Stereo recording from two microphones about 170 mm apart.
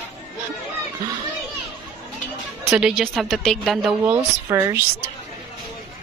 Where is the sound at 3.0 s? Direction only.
Centre (ahead or behind).